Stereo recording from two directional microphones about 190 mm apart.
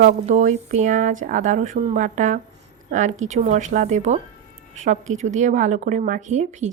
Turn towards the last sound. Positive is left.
turn(degrees=-40)  # may be behind; listen again after turning